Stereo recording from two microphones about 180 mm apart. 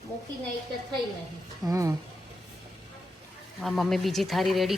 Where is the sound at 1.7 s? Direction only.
20° right (ahead or behind).